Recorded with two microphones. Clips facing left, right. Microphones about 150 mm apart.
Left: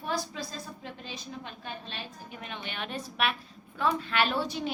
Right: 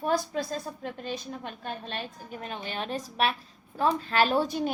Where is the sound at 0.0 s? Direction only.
50° right (ahead or behind).